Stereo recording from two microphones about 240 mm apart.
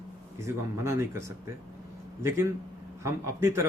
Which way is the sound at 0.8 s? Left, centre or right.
Centre.